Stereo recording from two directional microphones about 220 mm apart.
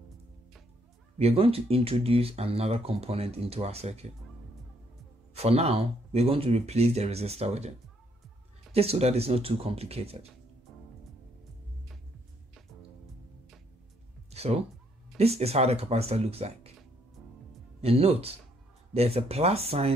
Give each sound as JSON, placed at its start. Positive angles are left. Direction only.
{"t": 1.1, "sound": "speech", "side_deg": -25}
{"t": 5.3, "sound": "speech", "side_deg": -30}
{"t": 8.7, "sound": "speech", "side_deg": -25}
{"t": 14.3, "sound": "music", "side_deg": -30}
{"t": 15.1, "sound": "speech", "side_deg": -30}
{"t": 17.7, "sound": "speech", "side_deg": -25}